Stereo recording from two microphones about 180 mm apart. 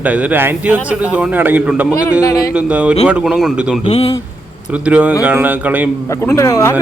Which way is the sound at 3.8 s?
30° left (ahead or behind).